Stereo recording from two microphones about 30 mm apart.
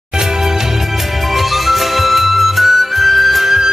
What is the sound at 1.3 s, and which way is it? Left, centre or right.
Music, centre.